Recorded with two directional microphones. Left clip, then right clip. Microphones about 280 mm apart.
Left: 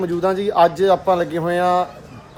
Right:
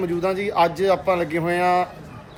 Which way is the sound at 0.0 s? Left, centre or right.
Centre.